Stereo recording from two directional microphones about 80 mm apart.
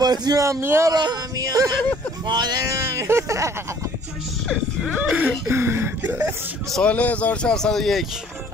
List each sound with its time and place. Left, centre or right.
0.0 s a man's voice: right
0.4 s speech: right
0.8 s yodeling: right
2.2 s speech: right
2.6 s speech: right
4.9 s whimper: right
6.7 s speech: centre